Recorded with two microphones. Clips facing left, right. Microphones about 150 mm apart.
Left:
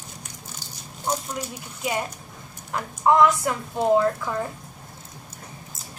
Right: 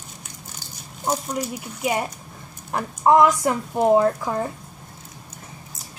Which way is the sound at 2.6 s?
25° right (ahead or behind).